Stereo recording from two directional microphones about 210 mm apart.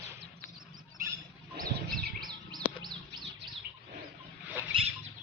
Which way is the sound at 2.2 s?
20° right (ahead or behind).